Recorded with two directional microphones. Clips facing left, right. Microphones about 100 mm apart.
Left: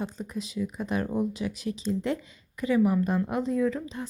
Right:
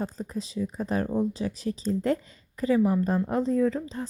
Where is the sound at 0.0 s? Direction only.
35° right (ahead or behind).